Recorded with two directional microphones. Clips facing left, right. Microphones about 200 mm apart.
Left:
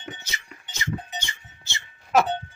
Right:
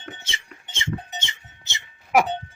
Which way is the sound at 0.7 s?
25° right (ahead or behind).